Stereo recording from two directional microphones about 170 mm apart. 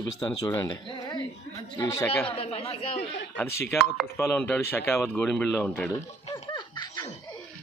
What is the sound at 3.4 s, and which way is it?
Speech, 15° left (ahead or behind).